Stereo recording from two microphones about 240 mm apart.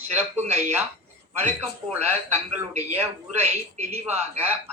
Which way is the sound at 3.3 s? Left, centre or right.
Right.